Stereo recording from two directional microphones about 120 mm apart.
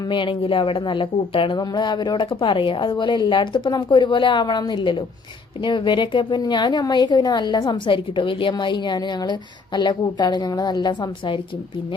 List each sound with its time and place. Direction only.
0.1 s a woman's voice: 45° left (ahead or behind)